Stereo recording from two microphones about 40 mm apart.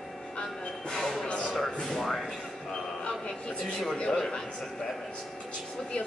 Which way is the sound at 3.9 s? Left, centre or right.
Left.